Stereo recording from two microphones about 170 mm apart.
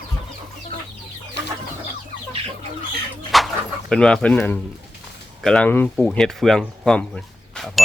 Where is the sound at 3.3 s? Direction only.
Centre (ahead or behind).